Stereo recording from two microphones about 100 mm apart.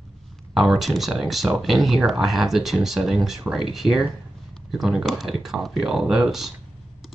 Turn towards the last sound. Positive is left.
turn(degrees=-5)  # may be behind; listen again after turning